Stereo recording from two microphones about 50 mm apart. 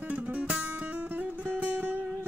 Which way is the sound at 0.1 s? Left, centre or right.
Right.